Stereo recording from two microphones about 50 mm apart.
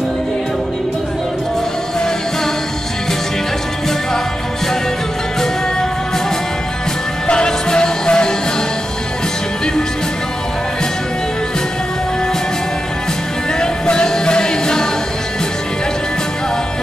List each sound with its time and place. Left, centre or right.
7.2 s music: centre
13.6 s music: centre